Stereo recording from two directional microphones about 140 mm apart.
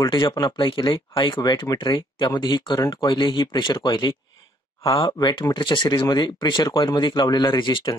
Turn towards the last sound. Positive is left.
turn(degrees=35)  # may be behind; listen again after turning